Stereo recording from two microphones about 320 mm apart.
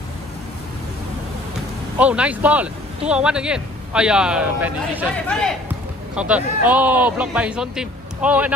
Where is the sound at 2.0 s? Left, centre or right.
Centre.